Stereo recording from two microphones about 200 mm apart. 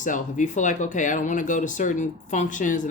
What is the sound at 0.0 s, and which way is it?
Speech, 40° left (ahead or behind).